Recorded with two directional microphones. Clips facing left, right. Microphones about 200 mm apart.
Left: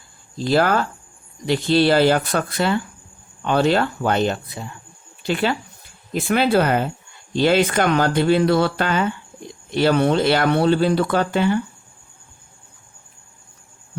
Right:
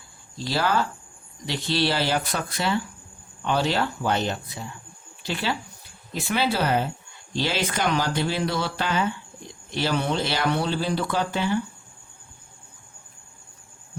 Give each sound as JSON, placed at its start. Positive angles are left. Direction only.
{"t": 0.5, "sound": "speech", "side_deg": 55}